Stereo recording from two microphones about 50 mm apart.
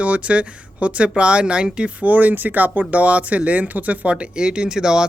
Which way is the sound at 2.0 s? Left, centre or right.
Right.